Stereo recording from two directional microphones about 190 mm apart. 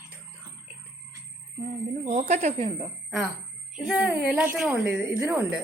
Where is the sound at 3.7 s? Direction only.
5° right (ahead or behind).